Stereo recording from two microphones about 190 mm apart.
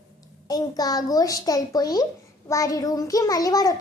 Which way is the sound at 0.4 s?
20° left (ahead or behind).